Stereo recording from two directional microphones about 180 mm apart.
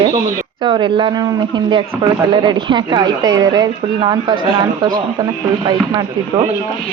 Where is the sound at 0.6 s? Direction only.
25° right (ahead or behind).